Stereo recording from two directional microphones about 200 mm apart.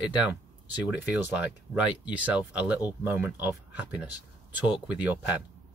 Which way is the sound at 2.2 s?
5° right (ahead or behind).